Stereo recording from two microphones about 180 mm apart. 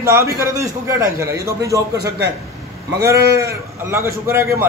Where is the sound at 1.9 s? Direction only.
65° right (ahead or behind).